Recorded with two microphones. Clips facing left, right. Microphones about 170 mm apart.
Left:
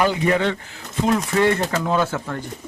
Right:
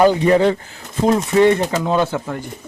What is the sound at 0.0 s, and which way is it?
Speech, 35° right (ahead or behind).